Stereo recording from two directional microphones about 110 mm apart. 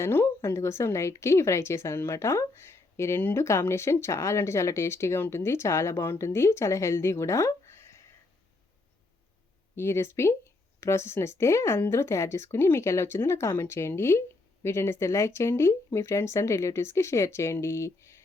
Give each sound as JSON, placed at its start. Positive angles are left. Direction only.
{"t": 0.0, "sound": "a woman's voice", "side_deg": 20}
{"t": 9.7, "sound": "a woman's voice", "side_deg": 25}